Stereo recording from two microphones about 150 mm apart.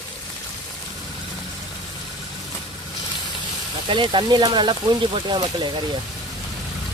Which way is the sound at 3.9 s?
30° right (ahead or behind).